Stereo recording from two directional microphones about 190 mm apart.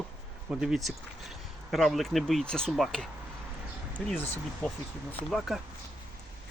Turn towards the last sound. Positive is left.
turn(degrees=0)  # may be behind; listen again after turning